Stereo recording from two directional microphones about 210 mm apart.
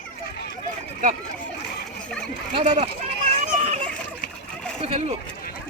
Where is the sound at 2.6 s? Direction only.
30° right (ahead or behind).